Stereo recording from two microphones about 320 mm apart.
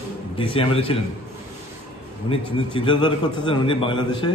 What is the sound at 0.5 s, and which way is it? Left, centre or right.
Speech, centre.